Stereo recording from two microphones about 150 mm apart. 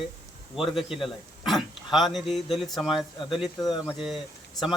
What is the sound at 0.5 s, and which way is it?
Speech, 5° right (ahead or behind).